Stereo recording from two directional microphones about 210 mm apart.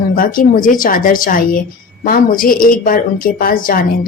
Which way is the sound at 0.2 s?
40° left (ahead or behind).